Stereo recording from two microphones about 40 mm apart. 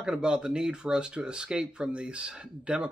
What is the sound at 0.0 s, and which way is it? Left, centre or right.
Speech, centre.